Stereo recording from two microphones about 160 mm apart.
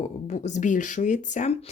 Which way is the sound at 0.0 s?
45° left (ahead or behind).